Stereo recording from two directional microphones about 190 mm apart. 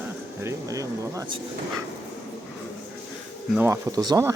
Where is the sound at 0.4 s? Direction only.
15° right (ahead or behind).